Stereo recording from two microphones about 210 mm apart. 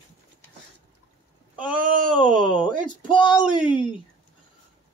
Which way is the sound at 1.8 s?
40° right (ahead or behind).